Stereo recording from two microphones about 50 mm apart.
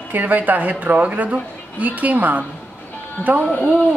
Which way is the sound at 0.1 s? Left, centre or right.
Right.